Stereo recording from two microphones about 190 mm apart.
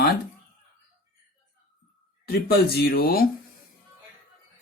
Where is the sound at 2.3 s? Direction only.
55° left (ahead or behind).